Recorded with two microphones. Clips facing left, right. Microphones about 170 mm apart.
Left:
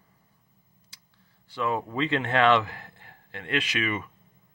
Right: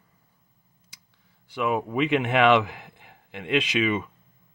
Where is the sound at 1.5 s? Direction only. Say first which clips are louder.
Right 3 dB; 15° right (ahead or behind).